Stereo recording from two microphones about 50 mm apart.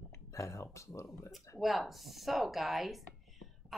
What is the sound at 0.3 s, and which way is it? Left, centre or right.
Speech, left.